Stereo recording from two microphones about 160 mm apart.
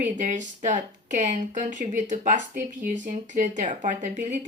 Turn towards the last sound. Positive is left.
turn(degrees=-50)  # may be behind; listen again after turning